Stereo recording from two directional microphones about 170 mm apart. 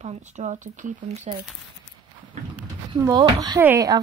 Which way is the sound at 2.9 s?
20° right (ahead or behind).